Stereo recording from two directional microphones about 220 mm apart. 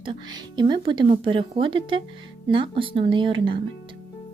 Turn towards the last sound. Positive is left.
turn(degrees=-20)  # may be behind; listen again after turning